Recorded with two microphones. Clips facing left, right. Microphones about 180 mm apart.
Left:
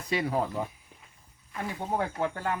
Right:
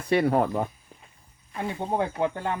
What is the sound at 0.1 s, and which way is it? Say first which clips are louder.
Speech: right 7 dB; 60° right (ahead or behind).